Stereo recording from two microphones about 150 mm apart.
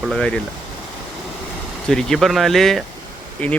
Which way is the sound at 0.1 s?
5° left (ahead or behind).